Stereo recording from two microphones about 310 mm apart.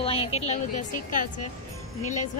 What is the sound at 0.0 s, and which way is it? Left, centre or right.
A woman's voice, centre.